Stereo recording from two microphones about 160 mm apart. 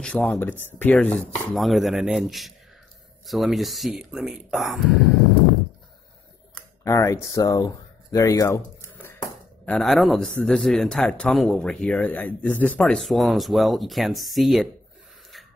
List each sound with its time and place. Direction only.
0.0 s speech: 5° left (ahead or behind)
6.8 s speech: 20° left (ahead or behind)
9.7 s speech: centre (ahead or behind)